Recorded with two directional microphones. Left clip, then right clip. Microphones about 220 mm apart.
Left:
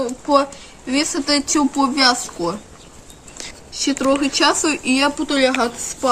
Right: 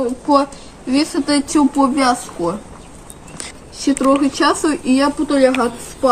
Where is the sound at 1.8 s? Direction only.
20° left (ahead or behind).